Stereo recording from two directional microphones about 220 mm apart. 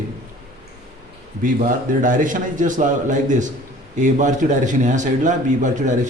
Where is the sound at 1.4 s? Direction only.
40° right (ahead or behind).